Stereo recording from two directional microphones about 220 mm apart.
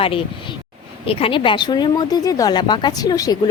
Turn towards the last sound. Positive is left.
turn(degrees=15)  # may be behind; listen again after turning